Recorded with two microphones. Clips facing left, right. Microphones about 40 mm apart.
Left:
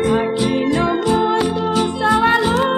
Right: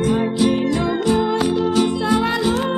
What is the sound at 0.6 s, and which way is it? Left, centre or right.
Music, left.